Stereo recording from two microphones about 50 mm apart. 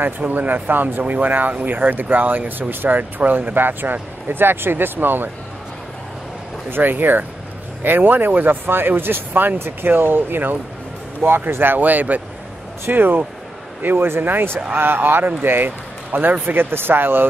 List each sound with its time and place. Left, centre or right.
0.3 s speech: right
6.7 s speech: right
13.8 s speech: right